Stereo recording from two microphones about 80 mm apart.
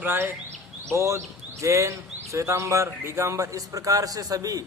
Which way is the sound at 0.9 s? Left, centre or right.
Right.